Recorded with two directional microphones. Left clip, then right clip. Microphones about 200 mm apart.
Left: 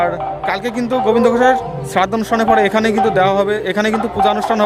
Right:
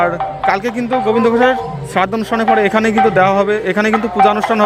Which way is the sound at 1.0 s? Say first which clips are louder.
Even; centre (ahead or behind).